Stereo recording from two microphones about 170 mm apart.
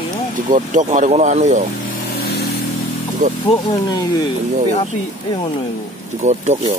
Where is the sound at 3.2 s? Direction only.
45° right (ahead or behind).